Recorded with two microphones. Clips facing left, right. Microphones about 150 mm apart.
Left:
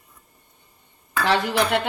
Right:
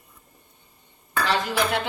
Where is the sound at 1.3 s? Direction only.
70° left (ahead or behind).